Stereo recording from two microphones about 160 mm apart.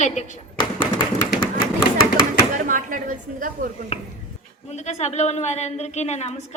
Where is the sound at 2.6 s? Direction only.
55° right (ahead or behind).